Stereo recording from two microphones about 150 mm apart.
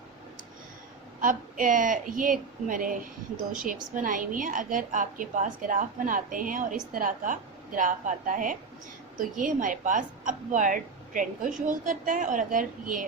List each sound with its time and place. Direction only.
1.2 s a woman's voice: 60° right (ahead or behind)